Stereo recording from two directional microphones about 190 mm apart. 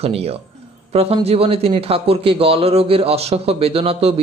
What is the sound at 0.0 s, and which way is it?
A man's voice, 30° right (ahead or behind).